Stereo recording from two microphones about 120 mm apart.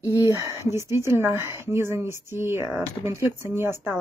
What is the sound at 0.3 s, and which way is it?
A woman's voice, 25° right (ahead or behind).